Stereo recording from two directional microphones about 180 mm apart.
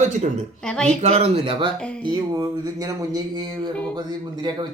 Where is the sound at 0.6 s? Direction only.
5° left (ahead or behind).